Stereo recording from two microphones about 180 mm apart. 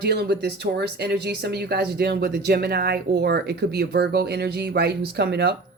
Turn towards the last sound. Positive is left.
turn(degrees=-65)  # may be behind; listen again after turning